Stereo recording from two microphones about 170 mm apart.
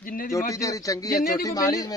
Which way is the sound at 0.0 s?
55° left (ahead or behind).